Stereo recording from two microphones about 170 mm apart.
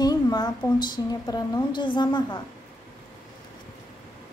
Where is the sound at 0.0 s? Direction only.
25° left (ahead or behind).